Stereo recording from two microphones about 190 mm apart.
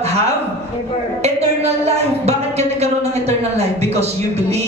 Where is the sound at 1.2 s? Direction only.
35° right (ahead or behind).